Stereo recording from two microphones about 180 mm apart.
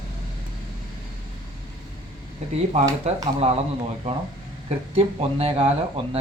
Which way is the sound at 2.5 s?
35° right (ahead or behind).